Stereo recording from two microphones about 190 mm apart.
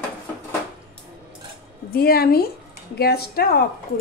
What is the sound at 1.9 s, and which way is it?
A woman's voice, 55° left (ahead or behind).